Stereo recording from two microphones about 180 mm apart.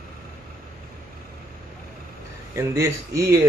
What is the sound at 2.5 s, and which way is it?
Speech, 15° right (ahead or behind).